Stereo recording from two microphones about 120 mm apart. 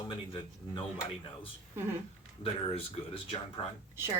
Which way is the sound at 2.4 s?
50° left (ahead or behind).